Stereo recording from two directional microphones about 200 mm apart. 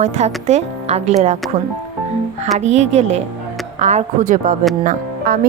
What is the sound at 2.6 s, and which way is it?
Music, 35° right (ahead or behind).